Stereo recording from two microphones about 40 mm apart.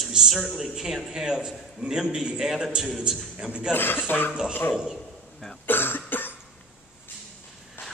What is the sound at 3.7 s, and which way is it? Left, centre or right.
Speech, left.